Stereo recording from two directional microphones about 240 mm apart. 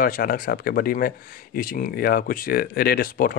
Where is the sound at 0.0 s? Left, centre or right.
Left.